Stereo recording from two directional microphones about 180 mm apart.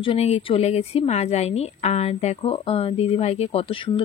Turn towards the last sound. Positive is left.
turn(degrees=30)  # may be behind; listen again after turning